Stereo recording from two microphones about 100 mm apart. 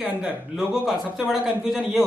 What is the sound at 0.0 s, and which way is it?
Speech, 5° right (ahead or behind).